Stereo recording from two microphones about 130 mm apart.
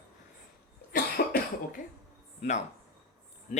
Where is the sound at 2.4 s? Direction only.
65° left (ahead or behind).